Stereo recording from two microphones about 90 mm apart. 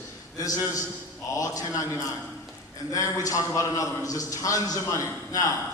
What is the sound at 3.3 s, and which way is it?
A man's voice, 35° left (ahead or behind).